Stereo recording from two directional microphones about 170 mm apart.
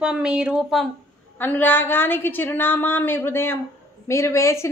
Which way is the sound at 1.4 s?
10° left (ahead or behind).